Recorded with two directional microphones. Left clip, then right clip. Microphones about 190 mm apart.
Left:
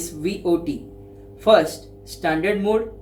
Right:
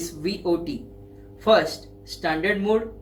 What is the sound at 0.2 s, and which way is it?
Speech, 50° left (ahead or behind).